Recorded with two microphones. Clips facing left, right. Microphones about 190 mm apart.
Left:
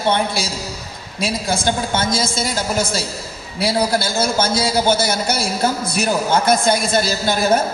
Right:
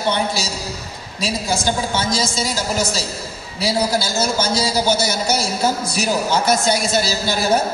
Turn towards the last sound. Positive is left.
turn(degrees=55)  # may be behind; listen again after turning